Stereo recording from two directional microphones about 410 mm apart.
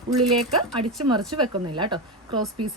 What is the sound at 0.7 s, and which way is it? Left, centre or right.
Speech, centre.